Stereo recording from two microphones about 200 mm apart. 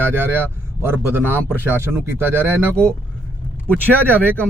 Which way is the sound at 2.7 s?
5° left (ahead or behind).